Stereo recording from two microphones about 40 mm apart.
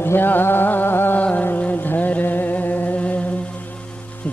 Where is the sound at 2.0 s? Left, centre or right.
Left.